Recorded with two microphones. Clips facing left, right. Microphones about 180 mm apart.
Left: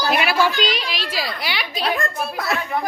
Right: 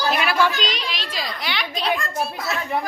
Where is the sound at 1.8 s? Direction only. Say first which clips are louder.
Left 1 dB; 55° left (ahead or behind).